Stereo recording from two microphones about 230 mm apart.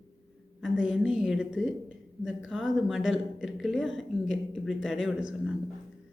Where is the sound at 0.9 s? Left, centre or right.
Centre.